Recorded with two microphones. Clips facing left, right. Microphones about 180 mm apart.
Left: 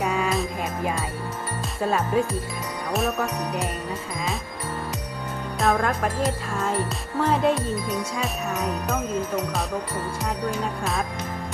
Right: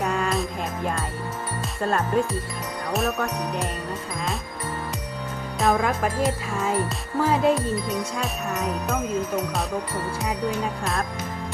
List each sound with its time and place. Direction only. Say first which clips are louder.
0.0 s music: even; 5° left (ahead or behind)
1.8 s music: even; 5° left (ahead or behind)
5.5 s music: right 1 dB; centre (ahead or behind)